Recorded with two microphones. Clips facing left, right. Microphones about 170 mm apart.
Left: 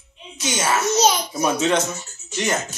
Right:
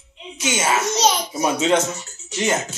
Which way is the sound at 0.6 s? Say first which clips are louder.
Left 1 dB; 15° right (ahead or behind).